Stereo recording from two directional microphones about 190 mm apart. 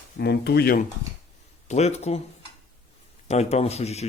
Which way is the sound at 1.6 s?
35° left (ahead or behind).